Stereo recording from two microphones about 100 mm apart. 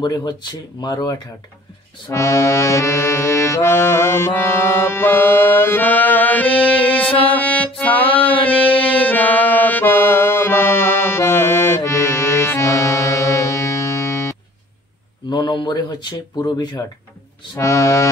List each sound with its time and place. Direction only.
0.0 s speech: 45° left (ahead or behind)
2.1 s accordion: 30° left (ahead or behind); by 7.2 s 15° left (ahead or behind)
7.3 s music: 15° left (ahead or behind)
8.4 s a sound: 15° left (ahead or behind)
8.7 s music: 15° left (ahead or behind)
15.2 s speech: 45° left (ahead or behind)
16.4 s music: 35° left (ahead or behind)